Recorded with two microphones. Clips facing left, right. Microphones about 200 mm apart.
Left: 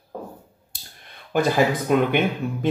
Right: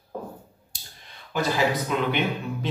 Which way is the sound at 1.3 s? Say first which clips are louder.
Left 5 dB; 55° left (ahead or behind).